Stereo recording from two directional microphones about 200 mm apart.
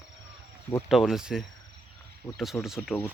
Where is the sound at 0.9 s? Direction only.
Centre (ahead or behind).